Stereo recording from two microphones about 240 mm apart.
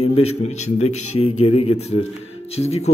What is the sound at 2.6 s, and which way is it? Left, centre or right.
Speech, left.